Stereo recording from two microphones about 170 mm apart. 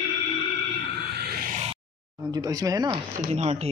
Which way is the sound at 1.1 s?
70° right (ahead or behind).